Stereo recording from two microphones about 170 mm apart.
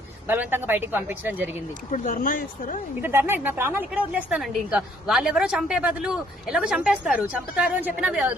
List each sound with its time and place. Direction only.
0.3 s a woman's voice: 10° right (ahead or behind)
1.9 s speech: 50° left (ahead or behind)
3.0 s a woman's voice: 15° right (ahead or behind)